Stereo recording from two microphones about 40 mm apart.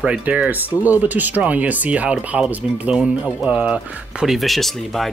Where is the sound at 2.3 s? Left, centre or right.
Centre.